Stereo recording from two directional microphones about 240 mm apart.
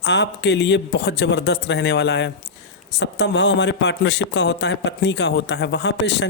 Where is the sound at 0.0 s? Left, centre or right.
Left.